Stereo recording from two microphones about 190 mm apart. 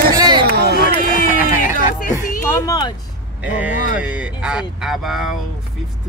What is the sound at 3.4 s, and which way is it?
Speech, 10° right (ahead or behind).